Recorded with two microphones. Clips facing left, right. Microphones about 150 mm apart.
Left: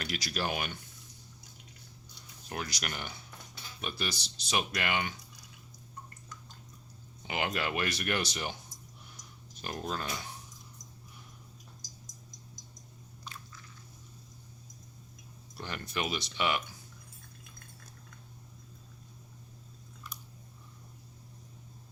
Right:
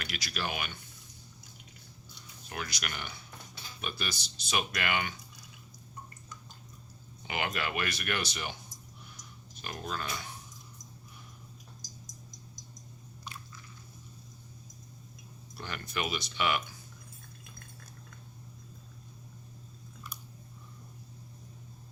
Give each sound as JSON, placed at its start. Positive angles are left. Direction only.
{"t": 0.0, "sound": "speech", "side_deg": 35}
{"t": 2.5, "sound": "speech", "side_deg": 35}
{"t": 7.3, "sound": "speech", "side_deg": 25}
{"t": 9.6, "sound": "speech", "side_deg": 35}
{"t": 15.6, "sound": "speech", "side_deg": 25}